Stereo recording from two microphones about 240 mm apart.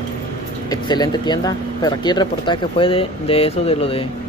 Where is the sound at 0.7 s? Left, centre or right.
Centre.